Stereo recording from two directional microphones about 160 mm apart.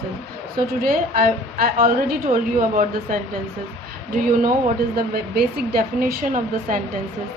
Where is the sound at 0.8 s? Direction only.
65° right (ahead or behind).